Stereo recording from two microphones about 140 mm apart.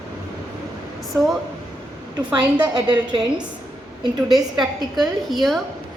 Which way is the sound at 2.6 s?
30° right (ahead or behind).